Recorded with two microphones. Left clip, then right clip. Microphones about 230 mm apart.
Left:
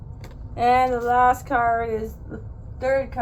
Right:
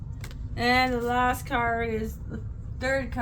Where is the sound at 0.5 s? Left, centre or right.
Right.